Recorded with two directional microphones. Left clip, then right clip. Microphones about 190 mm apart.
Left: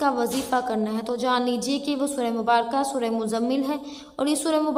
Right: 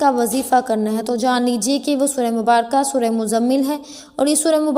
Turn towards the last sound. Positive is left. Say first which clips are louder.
# right 7 dB
turn(degrees=-25)  # may be behind; listen again after turning